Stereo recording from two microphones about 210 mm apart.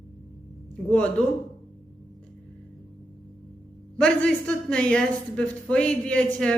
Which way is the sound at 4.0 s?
5° left (ahead or behind).